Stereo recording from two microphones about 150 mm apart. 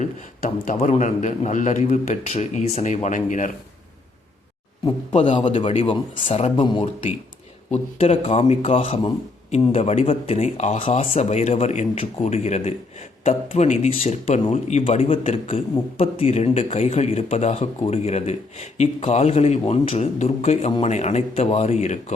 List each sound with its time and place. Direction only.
0.0 s a man's voice: 60° left (ahead or behind)
5.1 s speech: 35° left (ahead or behind)
7.7 s speech: 45° left (ahead or behind)